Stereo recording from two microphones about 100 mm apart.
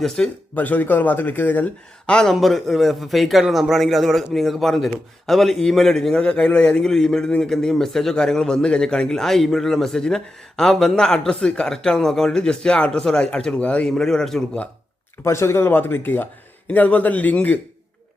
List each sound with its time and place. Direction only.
0.2 s speech: 5° left (ahead or behind)
0.5 s a man's voice: 15° left (ahead or behind)
15.2 s speech: 25° left (ahead or behind)